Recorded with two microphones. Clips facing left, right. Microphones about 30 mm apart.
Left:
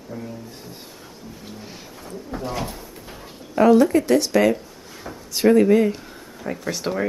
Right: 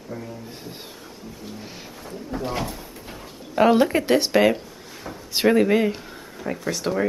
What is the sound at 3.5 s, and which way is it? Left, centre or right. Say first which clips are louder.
Speech: left 3 dB; right.